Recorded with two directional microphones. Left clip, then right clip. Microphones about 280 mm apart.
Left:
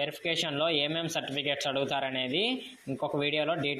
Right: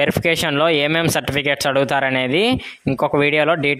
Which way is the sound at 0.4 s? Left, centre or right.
Right.